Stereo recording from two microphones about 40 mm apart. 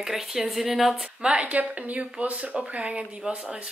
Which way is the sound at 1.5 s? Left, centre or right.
Right.